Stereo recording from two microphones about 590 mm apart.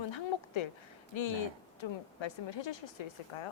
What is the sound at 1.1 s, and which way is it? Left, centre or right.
Speech, left.